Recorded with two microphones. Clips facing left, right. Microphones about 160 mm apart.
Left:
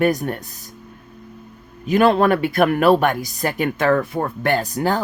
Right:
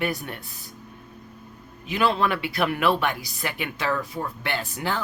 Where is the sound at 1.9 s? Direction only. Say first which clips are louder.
Left 8 dB; 50° left (ahead or behind).